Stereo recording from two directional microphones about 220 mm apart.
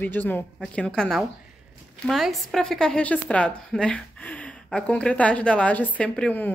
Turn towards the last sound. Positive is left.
turn(degrees=5)  # may be behind; listen again after turning